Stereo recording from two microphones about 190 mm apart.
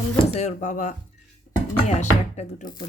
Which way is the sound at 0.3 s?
40° left (ahead or behind).